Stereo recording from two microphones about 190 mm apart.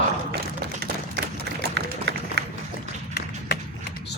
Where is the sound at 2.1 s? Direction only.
65° right (ahead or behind).